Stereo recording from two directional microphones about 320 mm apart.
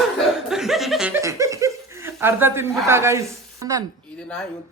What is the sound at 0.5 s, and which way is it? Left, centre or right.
Chuckle, centre.